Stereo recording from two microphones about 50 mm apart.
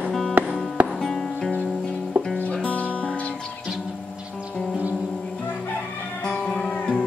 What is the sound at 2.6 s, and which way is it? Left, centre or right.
Music, left.